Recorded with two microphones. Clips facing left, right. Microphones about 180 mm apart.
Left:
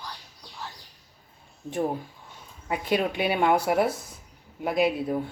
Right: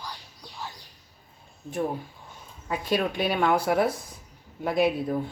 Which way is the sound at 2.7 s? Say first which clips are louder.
Left 1 dB; 15° left (ahead or behind).